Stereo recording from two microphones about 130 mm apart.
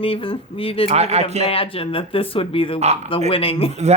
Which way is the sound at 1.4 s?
45° left (ahead or behind).